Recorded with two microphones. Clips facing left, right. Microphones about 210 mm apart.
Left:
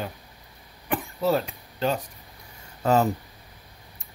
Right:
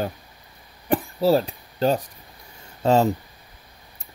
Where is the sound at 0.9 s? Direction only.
30° right (ahead or behind).